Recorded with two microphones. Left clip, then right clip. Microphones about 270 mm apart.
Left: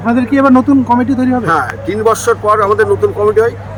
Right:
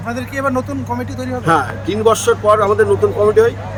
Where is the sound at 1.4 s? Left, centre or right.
Centre.